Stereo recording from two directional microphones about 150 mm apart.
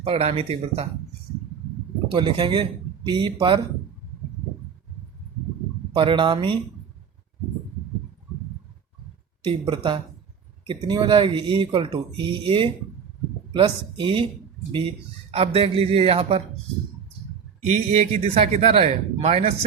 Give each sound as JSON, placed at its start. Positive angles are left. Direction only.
{"t": 0.0, "sound": "speech", "side_deg": -40}
{"t": 2.1, "sound": "speech", "side_deg": -30}
{"t": 5.9, "sound": "speech", "side_deg": -35}
{"t": 9.4, "sound": "speech", "side_deg": -35}
{"t": 15.3, "sound": "speech", "side_deg": -40}
{"t": 17.7, "sound": "speech", "side_deg": -45}